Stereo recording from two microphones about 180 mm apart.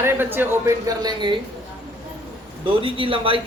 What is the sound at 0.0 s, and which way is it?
Speech, 10° right (ahead or behind).